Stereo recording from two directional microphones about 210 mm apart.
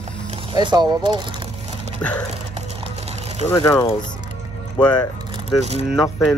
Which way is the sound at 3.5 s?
15° left (ahead or behind).